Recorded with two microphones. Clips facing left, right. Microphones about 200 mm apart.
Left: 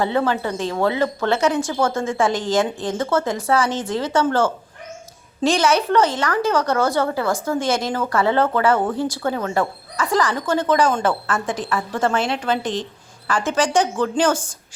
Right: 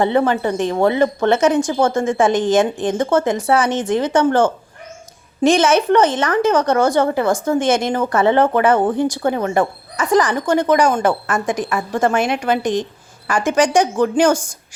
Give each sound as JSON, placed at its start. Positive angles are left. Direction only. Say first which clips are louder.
{"t": 0.0, "sound": "speech", "louder": "right 4 dB", "side_deg": -20}